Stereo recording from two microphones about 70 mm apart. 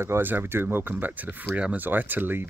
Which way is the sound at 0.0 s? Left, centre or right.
Right.